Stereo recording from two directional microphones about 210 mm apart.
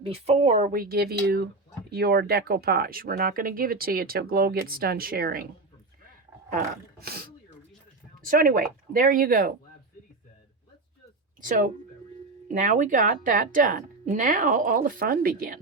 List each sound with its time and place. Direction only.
0.0 s speech: 30° right (ahead or behind); by 5.5 s 45° right (ahead or behind)
7.0 s speech: 45° right (ahead or behind)
11.3 s speech: 40° right (ahead or behind)